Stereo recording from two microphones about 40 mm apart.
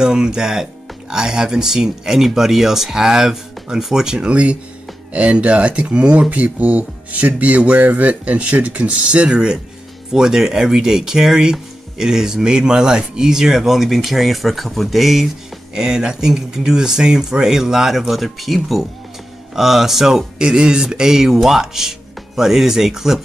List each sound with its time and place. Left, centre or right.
0.0 s speech: centre
4.2 s speech: right
6.3 s speech: right; by 15.3 s centre
15.7 s speech: centre